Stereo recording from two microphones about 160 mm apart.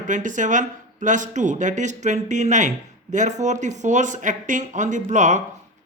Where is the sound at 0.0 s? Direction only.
50° right (ahead or behind).